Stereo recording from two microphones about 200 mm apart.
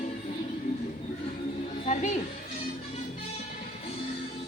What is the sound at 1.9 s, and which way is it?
Music, 35° left (ahead or behind).